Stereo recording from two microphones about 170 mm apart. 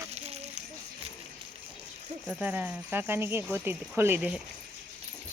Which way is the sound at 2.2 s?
5° right (ahead or behind).